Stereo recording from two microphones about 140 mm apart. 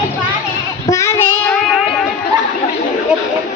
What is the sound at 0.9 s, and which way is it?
Child singing, 20° left (ahead or behind).